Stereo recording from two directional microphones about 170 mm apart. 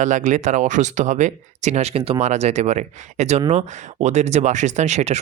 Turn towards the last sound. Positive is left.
turn(degrees=-40)  # may be behind; listen again after turning